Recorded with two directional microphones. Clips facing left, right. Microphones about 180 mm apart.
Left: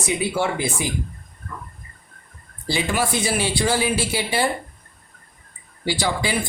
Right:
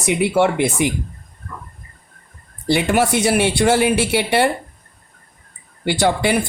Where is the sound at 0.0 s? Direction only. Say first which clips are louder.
Right 6 dB; 70° right (ahead or behind).